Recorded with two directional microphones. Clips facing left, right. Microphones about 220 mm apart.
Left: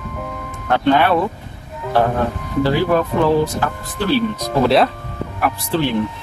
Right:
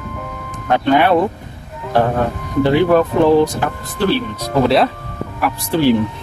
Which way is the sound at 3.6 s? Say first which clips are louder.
Right 1 dB; 15° right (ahead or behind).